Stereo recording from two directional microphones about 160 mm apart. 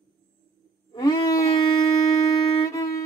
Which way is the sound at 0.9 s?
25° left (ahead or behind).